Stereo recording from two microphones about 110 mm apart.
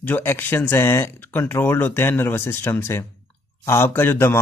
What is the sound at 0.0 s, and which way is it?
A man's voice, 20° left (ahead or behind).